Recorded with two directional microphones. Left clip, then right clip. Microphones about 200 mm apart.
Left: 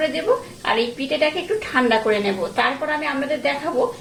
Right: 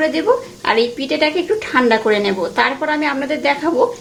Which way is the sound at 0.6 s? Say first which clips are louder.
Right 5 dB; 50° right (ahead or behind).